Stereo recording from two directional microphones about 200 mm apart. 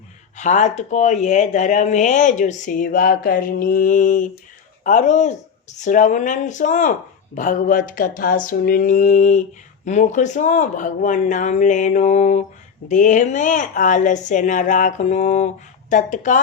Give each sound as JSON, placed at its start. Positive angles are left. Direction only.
{"t": 0.3, "sound": "speech", "side_deg": 35}